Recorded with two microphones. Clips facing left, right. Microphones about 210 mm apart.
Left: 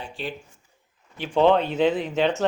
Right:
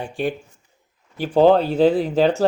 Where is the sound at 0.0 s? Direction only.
50° right (ahead or behind).